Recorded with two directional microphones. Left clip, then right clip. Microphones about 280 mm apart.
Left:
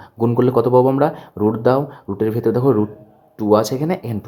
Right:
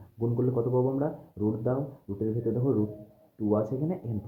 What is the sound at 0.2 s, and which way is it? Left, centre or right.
Speech, left.